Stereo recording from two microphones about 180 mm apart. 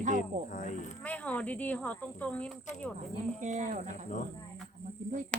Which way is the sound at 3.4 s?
40° right (ahead or behind).